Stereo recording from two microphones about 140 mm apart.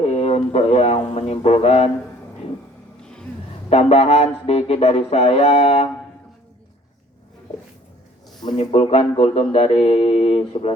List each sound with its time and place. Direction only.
0.0 s speech: 50° left (ahead or behind)
3.0 s insect: 5° left (ahead or behind)
3.7 s speech: 45° left (ahead or behind)
8.5 s speech: 45° left (ahead or behind)